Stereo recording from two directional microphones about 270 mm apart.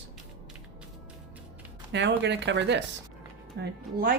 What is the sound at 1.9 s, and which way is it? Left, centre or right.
Speech, right.